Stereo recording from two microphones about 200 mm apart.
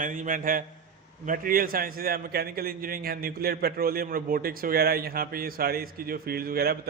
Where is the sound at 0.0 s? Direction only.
40° right (ahead or behind).